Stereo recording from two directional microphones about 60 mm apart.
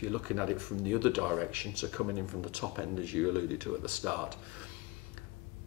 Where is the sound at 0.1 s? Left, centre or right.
Right.